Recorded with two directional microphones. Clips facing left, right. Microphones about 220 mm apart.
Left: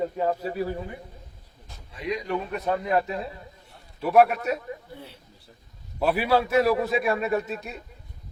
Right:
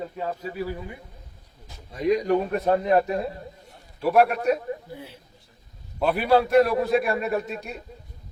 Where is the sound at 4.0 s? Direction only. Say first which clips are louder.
Left 1 dB; centre (ahead or behind).